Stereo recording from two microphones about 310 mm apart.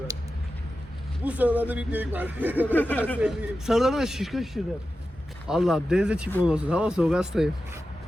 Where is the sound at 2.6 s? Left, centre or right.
Centre.